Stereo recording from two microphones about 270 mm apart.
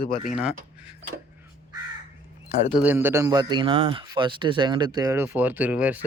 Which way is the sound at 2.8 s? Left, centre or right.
Centre.